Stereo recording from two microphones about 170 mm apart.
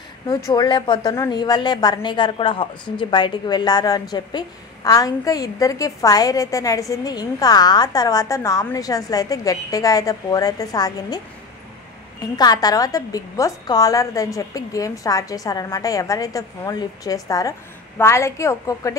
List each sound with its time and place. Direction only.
0.3 s a woman's voice: 20° left (ahead or behind)
12.4 s a woman's voice: 25° left (ahead or behind)